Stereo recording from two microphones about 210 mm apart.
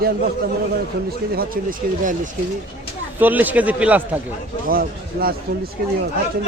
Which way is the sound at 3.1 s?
10° right (ahead or behind).